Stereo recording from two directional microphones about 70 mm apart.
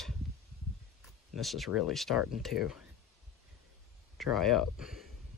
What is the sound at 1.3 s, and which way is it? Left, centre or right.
Speech, centre.